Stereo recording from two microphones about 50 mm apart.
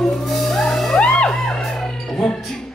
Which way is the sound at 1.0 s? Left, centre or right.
Centre.